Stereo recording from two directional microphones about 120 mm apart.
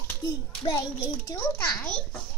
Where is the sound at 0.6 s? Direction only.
35° left (ahead or behind).